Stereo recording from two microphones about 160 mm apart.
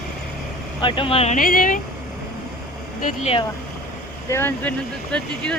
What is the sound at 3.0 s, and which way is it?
Speech, 45° left (ahead or behind).